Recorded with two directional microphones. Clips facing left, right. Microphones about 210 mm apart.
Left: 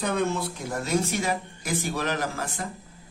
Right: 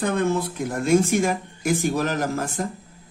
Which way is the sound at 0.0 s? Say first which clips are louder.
Right 4 dB; 55° right (ahead or behind).